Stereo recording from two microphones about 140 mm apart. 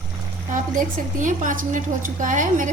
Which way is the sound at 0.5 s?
70° right (ahead or behind).